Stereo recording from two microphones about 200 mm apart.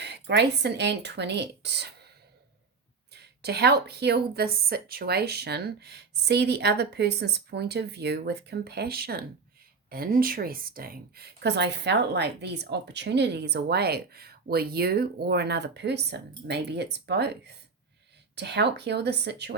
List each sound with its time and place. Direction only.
0.0 s speech: 60° right (ahead or behind)
3.1 s speech: 55° right (ahead or behind)